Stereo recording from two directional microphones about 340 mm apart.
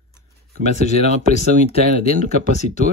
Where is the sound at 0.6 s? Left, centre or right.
Centre.